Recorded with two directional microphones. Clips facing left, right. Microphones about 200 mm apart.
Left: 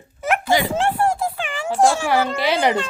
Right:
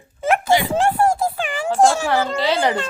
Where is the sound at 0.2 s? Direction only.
25° right (ahead or behind).